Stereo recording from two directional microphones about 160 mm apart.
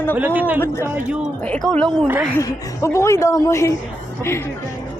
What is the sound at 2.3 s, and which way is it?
A woman's voice, 20° left (ahead or behind).